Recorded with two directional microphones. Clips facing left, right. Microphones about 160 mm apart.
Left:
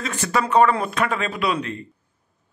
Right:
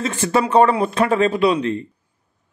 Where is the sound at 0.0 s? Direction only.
25° right (ahead or behind).